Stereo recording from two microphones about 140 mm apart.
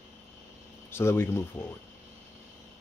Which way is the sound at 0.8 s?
15° left (ahead or behind).